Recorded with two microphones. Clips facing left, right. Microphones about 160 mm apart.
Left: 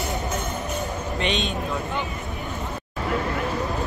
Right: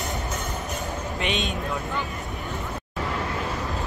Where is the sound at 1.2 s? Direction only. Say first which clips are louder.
Left 2 dB; 5° right (ahead or behind).